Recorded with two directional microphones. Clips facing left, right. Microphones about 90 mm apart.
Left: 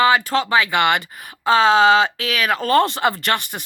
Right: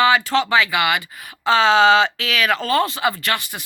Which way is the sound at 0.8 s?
45° left (ahead or behind).